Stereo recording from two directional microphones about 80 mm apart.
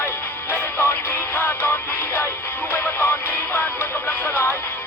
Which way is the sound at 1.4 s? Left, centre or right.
Left.